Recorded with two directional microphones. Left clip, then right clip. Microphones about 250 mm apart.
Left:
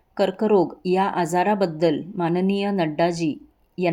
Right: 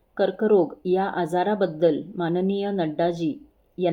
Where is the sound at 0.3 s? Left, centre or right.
Left.